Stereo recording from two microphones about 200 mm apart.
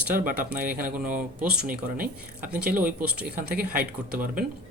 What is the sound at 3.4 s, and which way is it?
Speech, 45° right (ahead or behind).